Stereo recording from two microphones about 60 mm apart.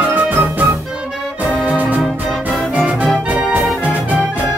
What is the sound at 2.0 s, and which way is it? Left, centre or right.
Music, centre.